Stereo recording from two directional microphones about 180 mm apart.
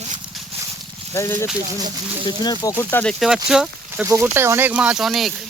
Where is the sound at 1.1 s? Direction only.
15° left (ahead or behind); by 4.0 s 5° right (ahead or behind).